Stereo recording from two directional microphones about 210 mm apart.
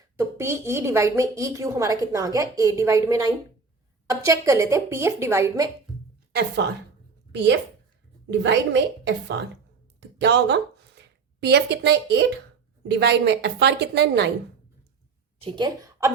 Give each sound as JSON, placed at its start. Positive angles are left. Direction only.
{"t": 0.2, "sound": "a woman's voice", "side_deg": -15}
{"t": 7.3, "sound": "a woman's voice", "side_deg": -55}
{"t": 10.2, "sound": "a woman's voice", "side_deg": -55}
{"t": 15.4, "sound": "a woman's voice", "side_deg": -25}